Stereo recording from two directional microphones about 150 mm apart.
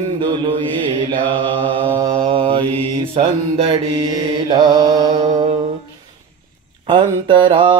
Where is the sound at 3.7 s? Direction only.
25° right (ahead or behind).